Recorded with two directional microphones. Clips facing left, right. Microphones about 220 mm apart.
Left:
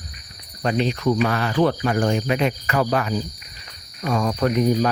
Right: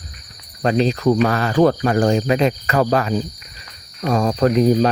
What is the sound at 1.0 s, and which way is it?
Speech, 40° right (ahead or behind).